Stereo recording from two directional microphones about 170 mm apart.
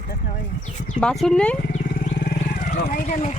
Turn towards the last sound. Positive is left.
turn(degrees=55)  # may be behind; listen again after turning